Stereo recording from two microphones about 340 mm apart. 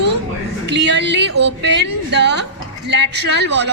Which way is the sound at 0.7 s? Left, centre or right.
Right.